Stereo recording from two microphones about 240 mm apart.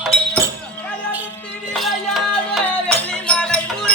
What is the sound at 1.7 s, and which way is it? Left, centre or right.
Music, centre.